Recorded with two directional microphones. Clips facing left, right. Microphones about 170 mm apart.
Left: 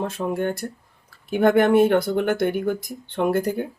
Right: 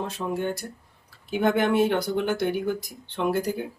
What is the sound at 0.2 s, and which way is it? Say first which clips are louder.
Speech: left 3 dB; 55° left (ahead or behind).